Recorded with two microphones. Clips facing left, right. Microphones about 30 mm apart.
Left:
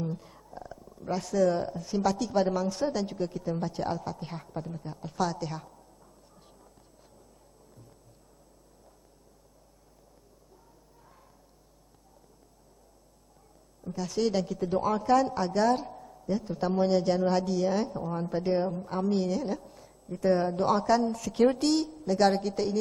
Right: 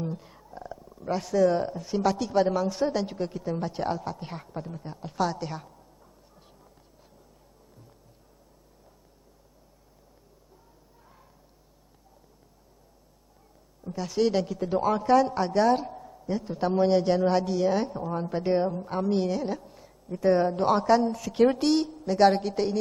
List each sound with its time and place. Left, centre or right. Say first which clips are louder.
0.0 s a woman's voice: right 1 dB; centre
13.8 s a woman's voice: right 3 dB; centre